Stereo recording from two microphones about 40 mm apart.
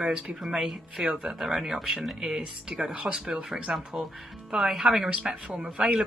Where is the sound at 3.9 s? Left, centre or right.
Right.